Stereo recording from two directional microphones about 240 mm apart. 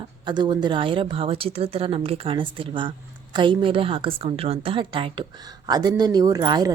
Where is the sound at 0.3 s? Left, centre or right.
Centre.